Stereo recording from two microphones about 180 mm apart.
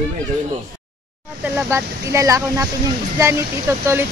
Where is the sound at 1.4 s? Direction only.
15° right (ahead or behind).